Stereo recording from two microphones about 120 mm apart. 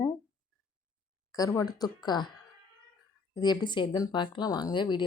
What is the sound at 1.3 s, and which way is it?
Speech, 30° left (ahead or behind).